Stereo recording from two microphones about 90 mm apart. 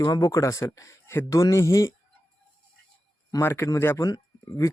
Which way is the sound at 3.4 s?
30° left (ahead or behind).